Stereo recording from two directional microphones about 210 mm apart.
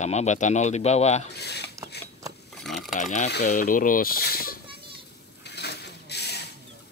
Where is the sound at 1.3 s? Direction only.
50° left (ahead or behind).